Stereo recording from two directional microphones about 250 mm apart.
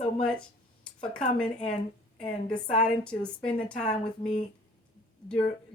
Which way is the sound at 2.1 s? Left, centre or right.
Centre.